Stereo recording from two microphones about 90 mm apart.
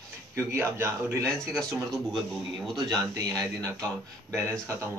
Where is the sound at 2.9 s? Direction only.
45° right (ahead or behind).